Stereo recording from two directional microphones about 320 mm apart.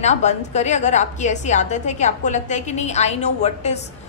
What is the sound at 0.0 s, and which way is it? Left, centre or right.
A woman's voice, left.